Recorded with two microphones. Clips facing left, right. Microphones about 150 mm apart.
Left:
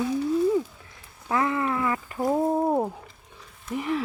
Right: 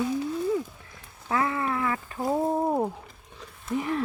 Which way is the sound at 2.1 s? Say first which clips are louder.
Left 2 dB; centre (ahead or behind).